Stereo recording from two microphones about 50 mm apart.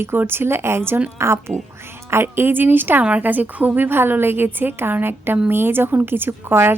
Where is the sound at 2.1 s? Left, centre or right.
Right.